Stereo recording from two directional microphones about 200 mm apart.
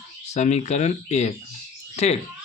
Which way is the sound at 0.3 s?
35° left (ahead or behind).